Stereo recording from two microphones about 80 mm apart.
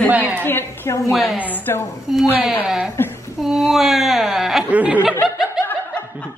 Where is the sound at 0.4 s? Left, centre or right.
Left.